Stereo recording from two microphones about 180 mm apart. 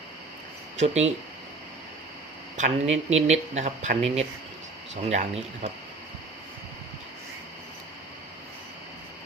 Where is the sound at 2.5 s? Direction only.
45° right (ahead or behind).